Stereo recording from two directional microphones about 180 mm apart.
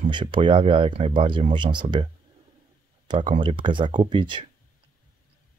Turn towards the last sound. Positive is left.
turn(degrees=-25)  # may be behind; listen again after turning